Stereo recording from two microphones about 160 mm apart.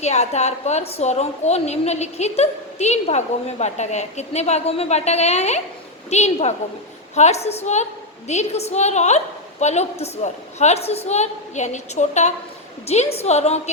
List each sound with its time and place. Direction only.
0.0 s a woman's voice: 45° left (ahead or behind)